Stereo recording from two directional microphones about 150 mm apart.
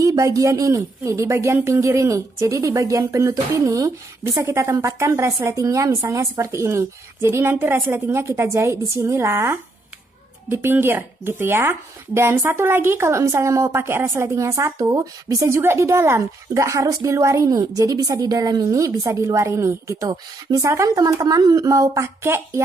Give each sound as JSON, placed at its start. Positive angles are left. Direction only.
{"t": 0.0, "sound": "speech", "side_deg": -20}